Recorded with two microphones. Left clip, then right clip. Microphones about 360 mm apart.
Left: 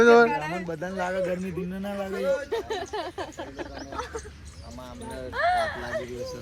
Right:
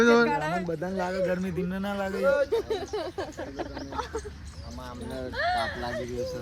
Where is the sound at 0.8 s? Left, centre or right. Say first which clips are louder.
Left 1 dB; left.